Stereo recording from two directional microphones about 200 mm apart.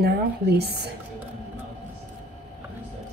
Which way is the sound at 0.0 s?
55° right (ahead or behind).